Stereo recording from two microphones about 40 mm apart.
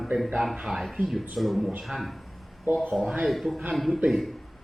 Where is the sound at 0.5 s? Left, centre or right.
Centre.